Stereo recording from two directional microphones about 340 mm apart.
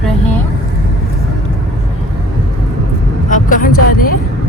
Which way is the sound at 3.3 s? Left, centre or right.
Left.